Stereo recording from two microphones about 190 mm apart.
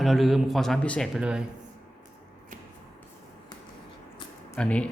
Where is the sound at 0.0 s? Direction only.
Centre (ahead or behind).